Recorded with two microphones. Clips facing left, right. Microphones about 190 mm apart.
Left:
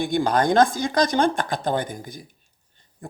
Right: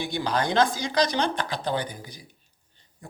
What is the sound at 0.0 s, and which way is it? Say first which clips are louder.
Speech: left 6 dB; 50° left (ahead or behind).